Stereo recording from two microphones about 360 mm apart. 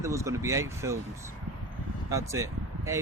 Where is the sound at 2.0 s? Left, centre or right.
Centre.